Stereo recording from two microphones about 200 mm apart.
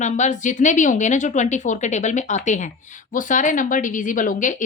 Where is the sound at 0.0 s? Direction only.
35° left (ahead or behind).